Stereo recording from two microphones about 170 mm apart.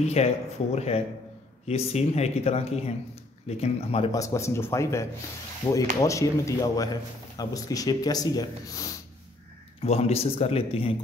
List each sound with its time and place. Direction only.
0.0 s speech: 40° left (ahead or behind)
4.1 s a man's voice: 20° left (ahead or behind)
9.8 s speech: 35° left (ahead or behind)